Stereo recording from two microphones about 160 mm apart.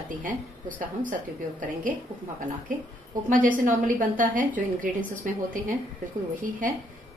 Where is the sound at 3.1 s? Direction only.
55° right (ahead or behind).